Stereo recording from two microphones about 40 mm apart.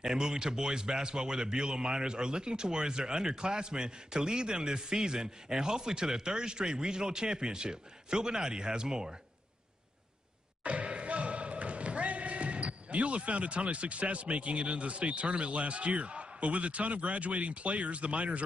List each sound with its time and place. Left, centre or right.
0.0 s a man's voice: centre
10.6 s speech: right